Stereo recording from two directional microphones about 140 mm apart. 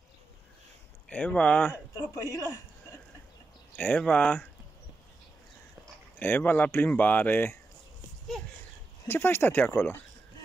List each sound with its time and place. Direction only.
1.0 s speech: 10° left (ahead or behind)
2.1 s speech: 25° left (ahead or behind)
3.7 s speech: 10° left (ahead or behind)
6.1 s speech: 15° left (ahead or behind)
9.0 s speech: 15° left (ahead or behind)